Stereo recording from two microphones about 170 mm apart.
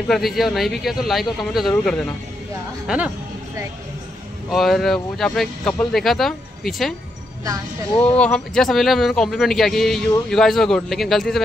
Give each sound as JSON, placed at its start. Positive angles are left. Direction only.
{"t": 0.1, "sound": "speech", "side_deg": 0}
{"t": 4.5, "sound": "speech", "side_deg": 0}
{"t": 7.9, "sound": "speech", "side_deg": 35}
{"t": 8.2, "sound": "speech", "side_deg": 5}